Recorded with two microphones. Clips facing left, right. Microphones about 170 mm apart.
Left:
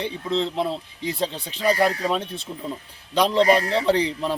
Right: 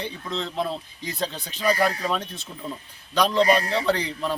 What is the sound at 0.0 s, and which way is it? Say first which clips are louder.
Speech: left 6 dB; 30° left (ahead or behind).